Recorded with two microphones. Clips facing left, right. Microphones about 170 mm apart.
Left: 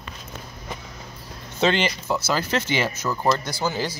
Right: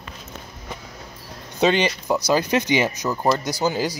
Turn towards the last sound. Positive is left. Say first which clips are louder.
# right 4 dB
turn(degrees=-15)  # may be behind; listen again after turning